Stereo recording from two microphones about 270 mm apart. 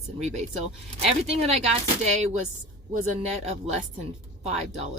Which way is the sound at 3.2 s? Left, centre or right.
Right.